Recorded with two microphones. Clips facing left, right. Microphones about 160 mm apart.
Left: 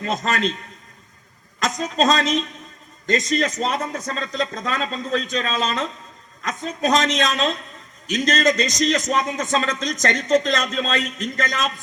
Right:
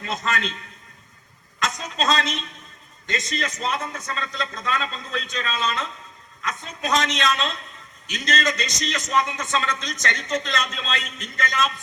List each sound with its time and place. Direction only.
0.0 s a man's voice: 45° left (ahead or behind)
1.5 s a man's voice: 45° left (ahead or behind)